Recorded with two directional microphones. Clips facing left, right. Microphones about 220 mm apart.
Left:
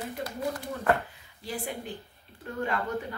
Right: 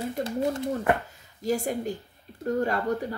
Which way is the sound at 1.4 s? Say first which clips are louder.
Right 9 dB; 45° right (ahead or behind).